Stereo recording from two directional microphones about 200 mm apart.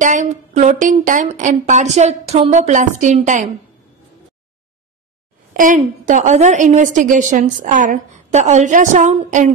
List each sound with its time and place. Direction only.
0.0 s a woman's voice: 40° right (ahead or behind)
5.5 s a woman's voice: 40° right (ahead or behind)